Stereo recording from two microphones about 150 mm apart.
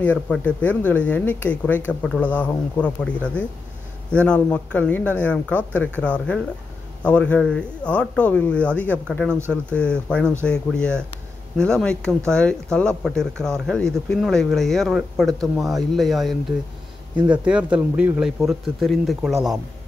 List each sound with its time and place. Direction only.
0.0 s speech: 10° left (ahead or behind)